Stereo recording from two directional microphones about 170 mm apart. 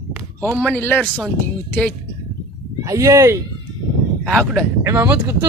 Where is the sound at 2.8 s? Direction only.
20° right (ahead or behind).